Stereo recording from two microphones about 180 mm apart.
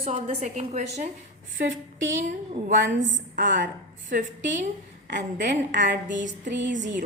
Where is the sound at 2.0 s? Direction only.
90° right.